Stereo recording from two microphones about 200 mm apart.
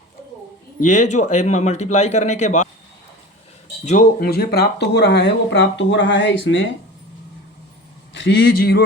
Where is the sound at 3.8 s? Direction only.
40° left (ahead or behind); by 6.6 s 65° left (ahead or behind).